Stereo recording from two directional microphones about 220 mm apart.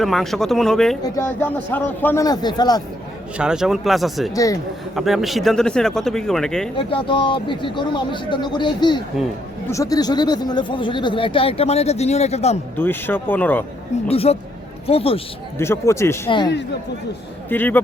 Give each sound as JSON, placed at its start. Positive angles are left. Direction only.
{"t": 0.0, "sound": "a man's voice", "side_deg": 0}
{"t": 3.3, "sound": "speech", "side_deg": -5}
{"t": 6.7, "sound": "speech", "side_deg": 25}
{"t": 12.7, "sound": "a man's voice", "side_deg": 10}
{"t": 14.1, "sound": "speech", "side_deg": 25}
{"t": 15.5, "sound": "a man's voice", "side_deg": 10}
{"t": 17.5, "sound": "a man's voice", "side_deg": 10}